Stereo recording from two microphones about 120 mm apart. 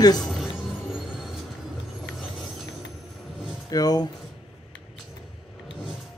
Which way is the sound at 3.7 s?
35° left (ahead or behind).